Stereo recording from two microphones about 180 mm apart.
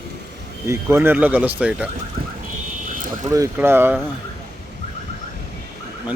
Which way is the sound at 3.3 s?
15° right (ahead or behind).